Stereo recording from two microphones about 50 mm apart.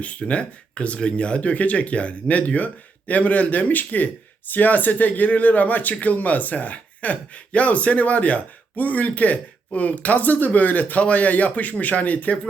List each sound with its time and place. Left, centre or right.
0.0 s speech: left